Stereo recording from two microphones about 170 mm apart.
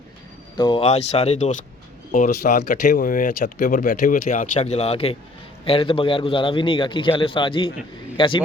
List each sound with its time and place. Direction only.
0.5 s speech: 25° left (ahead or behind)
0.8 s a man's voice: 40° left (ahead or behind)
2.1 s speech: 60° left (ahead or behind)
2.8 s a man's voice: 50° left (ahead or behind); by 8.4 s 30° left (ahead or behind)